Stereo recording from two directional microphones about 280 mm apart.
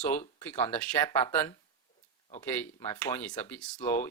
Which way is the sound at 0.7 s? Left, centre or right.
Centre.